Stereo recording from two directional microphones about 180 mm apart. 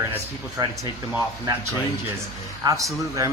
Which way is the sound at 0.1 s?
20° right (ahead or behind).